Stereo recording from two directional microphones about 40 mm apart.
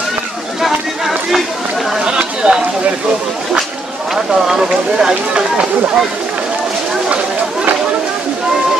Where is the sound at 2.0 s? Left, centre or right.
Right.